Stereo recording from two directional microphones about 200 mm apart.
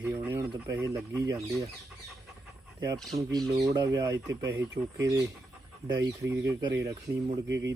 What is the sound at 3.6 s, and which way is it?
Speech, 15° right (ahead or behind).